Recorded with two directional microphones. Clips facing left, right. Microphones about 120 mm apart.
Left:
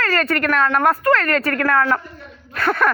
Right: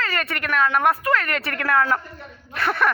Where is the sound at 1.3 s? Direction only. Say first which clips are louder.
Left 4 dB; 20° right (ahead or behind).